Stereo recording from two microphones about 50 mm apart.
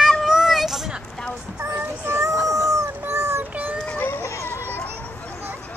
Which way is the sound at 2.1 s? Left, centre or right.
Right.